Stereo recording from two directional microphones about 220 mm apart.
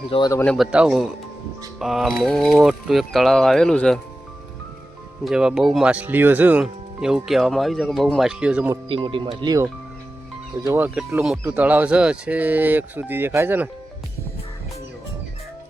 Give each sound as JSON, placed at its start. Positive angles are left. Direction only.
{"t": 0.1, "sound": "speech", "side_deg": 15}
{"t": 0.4, "sound": "speech", "side_deg": 0}
{"t": 5.2, "sound": "speech", "side_deg": -5}
{"t": 8.7, "sound": "speech", "side_deg": -20}